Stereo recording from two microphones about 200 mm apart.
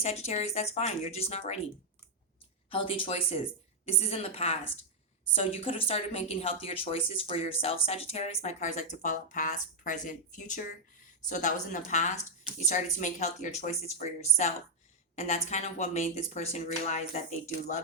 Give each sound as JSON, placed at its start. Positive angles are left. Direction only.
{"t": 0.0, "sound": "speech", "side_deg": 30}
{"t": 2.6, "sound": "speech", "side_deg": 25}